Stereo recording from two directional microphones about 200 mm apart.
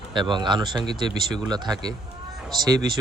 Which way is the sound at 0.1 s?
25° right (ahead or behind).